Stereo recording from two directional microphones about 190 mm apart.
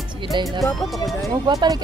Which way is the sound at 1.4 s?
20° right (ahead or behind).